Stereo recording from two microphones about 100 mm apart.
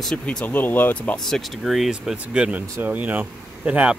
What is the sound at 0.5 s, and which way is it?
Speech, 20° left (ahead or behind).